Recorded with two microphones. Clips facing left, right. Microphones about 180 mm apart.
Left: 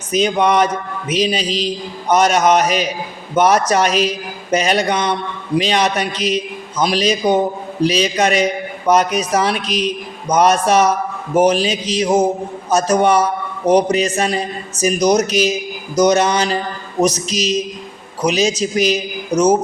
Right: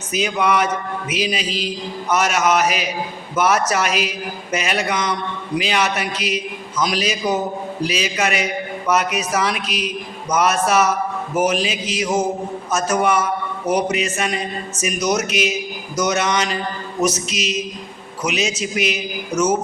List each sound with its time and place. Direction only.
0.1 s a man's voice: 35° left (ahead or behind)
9.6 s a man's voice: 5° right (ahead or behind)
10.2 s a man's voice: 35° left (ahead or behind)